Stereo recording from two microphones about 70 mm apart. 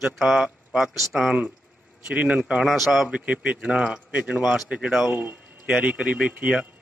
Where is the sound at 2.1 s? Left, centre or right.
Centre.